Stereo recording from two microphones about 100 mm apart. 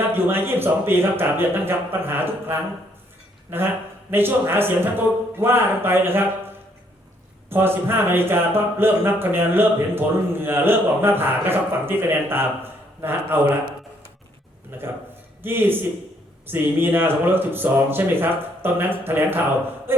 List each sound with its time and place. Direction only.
0.1 s speech: 20° right (ahead or behind)
7.5 s speech: 20° right (ahead or behind)
14.7 s a man's voice: 20° right (ahead or behind)
19.9 s a sound: 20° right (ahead or behind)